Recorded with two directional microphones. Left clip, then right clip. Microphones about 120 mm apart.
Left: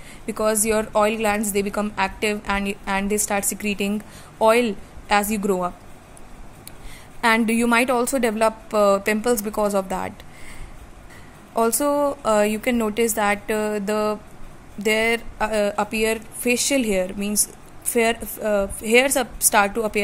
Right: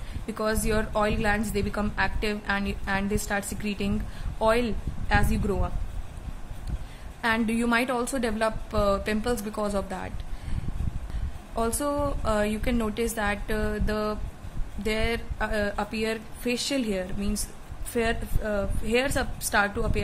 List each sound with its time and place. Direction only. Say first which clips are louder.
0.3 s a woman's voice: left 7 dB; 30° left (ahead or behind)
7.2 s a woman's voice: left 7 dB; 45° left (ahead or behind)
11.5 s a woman's voice: left 8 dB; 35° left (ahead or behind)